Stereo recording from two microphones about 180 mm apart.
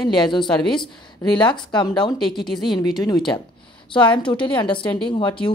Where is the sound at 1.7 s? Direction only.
25° left (ahead or behind).